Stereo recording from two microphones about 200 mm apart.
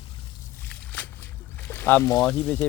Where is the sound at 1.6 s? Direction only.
10° left (ahead or behind).